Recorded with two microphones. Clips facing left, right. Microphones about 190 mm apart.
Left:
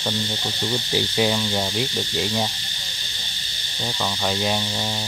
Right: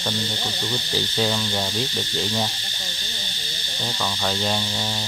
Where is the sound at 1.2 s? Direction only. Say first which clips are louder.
Left 2 dB; 10° left (ahead or behind).